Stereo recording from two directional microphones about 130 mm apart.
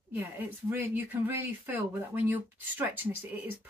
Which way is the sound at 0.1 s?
15° right (ahead or behind).